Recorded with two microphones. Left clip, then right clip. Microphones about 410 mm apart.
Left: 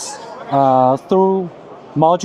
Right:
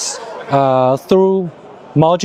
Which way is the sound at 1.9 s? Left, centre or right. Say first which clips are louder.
Right 1 dB; right.